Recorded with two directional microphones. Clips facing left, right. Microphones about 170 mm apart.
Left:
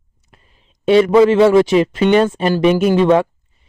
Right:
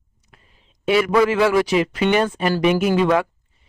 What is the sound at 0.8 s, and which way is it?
Speech, 25° left (ahead or behind).